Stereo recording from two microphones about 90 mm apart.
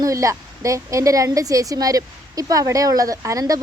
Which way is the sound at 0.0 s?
40° right (ahead or behind).